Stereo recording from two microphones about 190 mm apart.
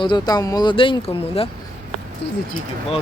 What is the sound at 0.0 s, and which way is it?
Speech, 20° left (ahead or behind).